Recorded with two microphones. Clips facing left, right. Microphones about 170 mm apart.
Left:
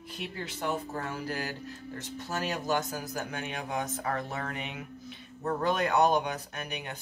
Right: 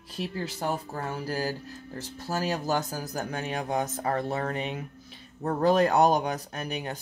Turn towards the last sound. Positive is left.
turn(degrees=-35)  # may be behind; listen again after turning